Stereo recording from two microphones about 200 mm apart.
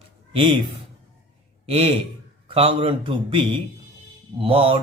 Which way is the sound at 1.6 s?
30° right (ahead or behind).